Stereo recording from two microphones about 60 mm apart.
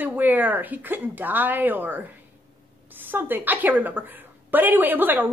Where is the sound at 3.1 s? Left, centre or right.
Right.